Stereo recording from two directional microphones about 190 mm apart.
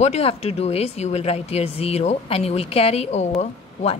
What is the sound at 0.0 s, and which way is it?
A woman's voice, 35° left (ahead or behind).